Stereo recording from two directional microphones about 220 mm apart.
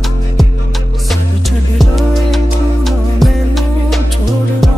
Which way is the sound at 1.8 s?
Centre (ahead or behind).